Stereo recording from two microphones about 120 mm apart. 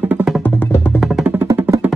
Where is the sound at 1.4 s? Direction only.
20° right (ahead or behind).